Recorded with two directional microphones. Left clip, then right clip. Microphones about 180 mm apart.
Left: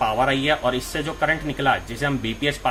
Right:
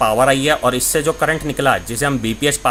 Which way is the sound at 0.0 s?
65° right (ahead or behind).